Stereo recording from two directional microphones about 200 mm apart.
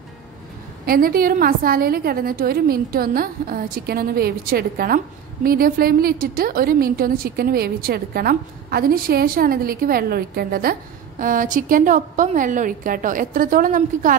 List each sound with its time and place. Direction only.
0.8 s a woman's voice: 45° right (ahead or behind)